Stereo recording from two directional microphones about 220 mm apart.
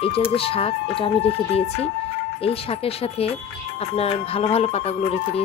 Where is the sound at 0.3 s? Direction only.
25° left (ahead or behind).